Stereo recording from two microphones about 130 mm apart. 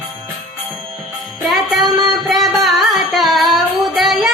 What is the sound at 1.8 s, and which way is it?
Music, 30° right (ahead or behind).